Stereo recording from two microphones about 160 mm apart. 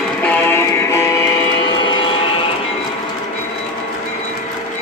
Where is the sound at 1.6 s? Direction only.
30° left (ahead or behind).